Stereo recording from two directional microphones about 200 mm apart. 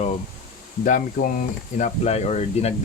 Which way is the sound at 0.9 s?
45° left (ahead or behind).